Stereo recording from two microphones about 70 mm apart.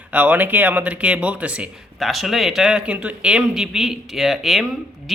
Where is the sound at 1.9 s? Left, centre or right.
Centre.